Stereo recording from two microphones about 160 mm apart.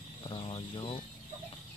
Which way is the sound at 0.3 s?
35° left (ahead or behind).